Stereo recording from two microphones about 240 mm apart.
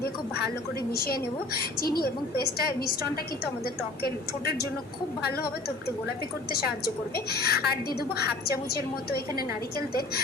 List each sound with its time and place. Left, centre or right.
0.9 s a woman's voice: left
4.0 s a woman's voice: left
6.5 s a woman's voice: left